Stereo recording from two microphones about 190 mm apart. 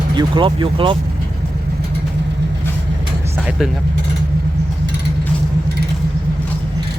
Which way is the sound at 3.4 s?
Centre (ahead or behind).